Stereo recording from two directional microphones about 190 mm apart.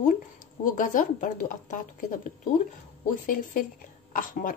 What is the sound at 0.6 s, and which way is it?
A woman's voice, 45° left (ahead or behind).